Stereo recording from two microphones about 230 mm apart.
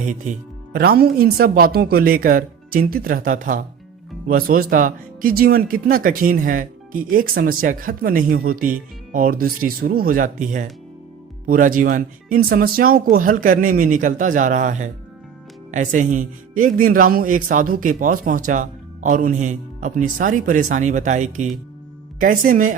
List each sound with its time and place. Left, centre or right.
0.0 s speech: right